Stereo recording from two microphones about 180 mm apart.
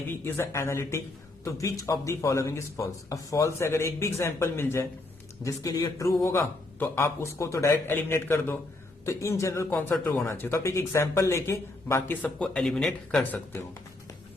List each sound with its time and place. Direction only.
0.3 s speech: 15° left (ahead or behind)